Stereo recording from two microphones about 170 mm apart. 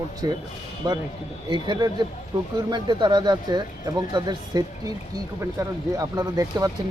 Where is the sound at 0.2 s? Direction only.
20° right (ahead or behind).